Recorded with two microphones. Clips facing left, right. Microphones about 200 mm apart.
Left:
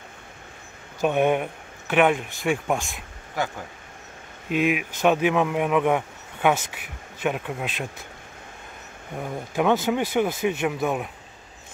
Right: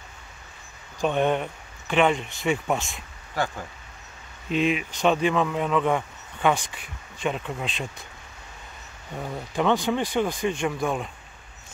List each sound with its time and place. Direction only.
1.0 s speech: 10° left (ahead or behind)
4.5 s speech: 10° left (ahead or behind)
9.3 s speech: 10° left (ahead or behind)